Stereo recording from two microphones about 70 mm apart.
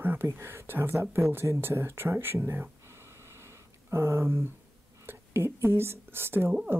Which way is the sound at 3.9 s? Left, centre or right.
Right.